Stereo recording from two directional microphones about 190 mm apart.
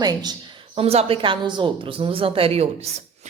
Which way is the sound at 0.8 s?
30° right (ahead or behind).